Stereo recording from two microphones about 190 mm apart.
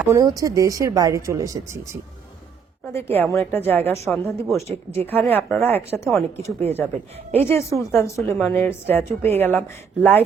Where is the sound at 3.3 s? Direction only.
10° left (ahead or behind).